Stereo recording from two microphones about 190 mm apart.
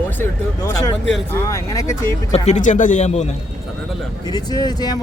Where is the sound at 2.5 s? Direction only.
40° left (ahead or behind).